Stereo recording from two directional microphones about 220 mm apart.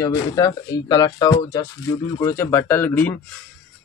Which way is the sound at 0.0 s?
15° left (ahead or behind).